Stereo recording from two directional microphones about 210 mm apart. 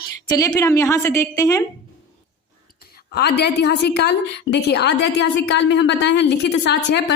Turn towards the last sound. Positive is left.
turn(degrees=55)  # may be behind; listen again after turning